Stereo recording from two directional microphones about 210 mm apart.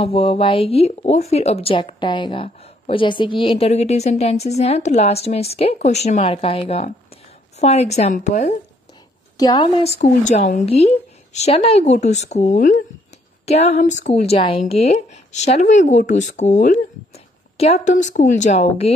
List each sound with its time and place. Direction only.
0.0 s speech: 25° left (ahead or behind)
9.4 s speech: 20° left (ahead or behind)